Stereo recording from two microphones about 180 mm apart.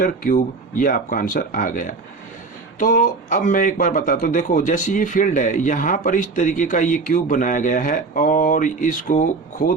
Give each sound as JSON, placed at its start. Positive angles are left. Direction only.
{"t": 0.0, "sound": "speech", "side_deg": 50}